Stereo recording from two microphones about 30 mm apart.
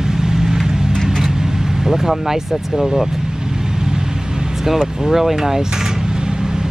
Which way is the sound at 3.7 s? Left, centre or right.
Right.